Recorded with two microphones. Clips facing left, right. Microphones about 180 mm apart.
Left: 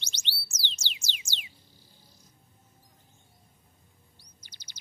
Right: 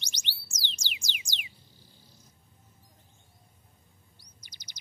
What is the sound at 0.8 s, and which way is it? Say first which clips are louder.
Music: even; 15° right (ahead or behind).